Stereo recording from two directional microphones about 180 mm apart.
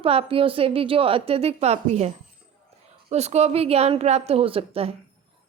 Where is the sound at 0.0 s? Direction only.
30° right (ahead or behind).